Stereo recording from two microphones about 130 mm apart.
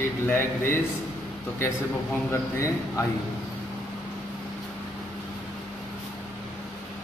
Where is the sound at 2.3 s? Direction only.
25° left (ahead or behind).